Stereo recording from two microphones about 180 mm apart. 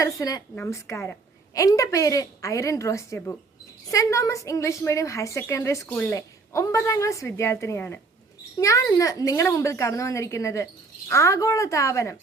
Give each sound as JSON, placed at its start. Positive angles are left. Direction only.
{"t": 0.0, "sound": "a woman's voice", "side_deg": 20}